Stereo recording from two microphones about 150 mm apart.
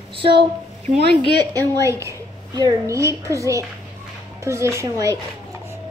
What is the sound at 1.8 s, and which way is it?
A child's voice, 20° right (ahead or behind).